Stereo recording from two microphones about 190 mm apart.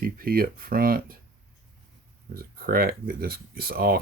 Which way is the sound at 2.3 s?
50° right (ahead or behind).